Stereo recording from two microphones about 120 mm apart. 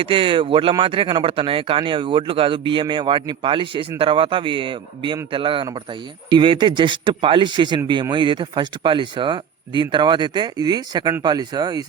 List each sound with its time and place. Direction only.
0.0 s speech: 45° right (ahead or behind)